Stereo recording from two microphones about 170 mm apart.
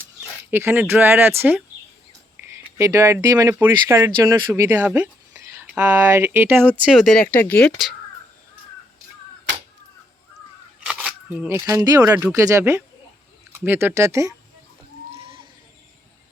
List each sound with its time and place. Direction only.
0.5 s speech: 10° right (ahead or behind)
6.9 s speech: centre (ahead or behind)
10.8 s a sound: 5° right (ahead or behind)
11.4 s speech: 15° right (ahead or behind)